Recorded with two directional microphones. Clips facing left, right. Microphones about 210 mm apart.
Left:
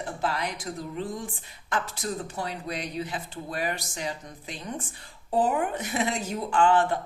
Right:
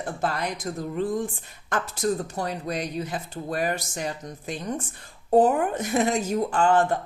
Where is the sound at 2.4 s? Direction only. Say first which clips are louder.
Right 4 dB; 45° right (ahead or behind).